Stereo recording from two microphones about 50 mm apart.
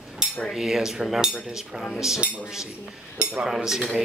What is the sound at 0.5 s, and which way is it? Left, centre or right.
Cutlery, centre.